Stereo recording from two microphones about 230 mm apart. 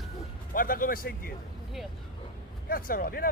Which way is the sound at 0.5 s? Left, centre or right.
Left.